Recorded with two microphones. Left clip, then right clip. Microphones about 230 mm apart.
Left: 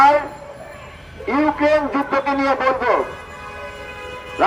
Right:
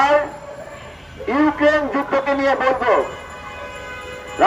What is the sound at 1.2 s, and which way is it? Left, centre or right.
A man's voice, left.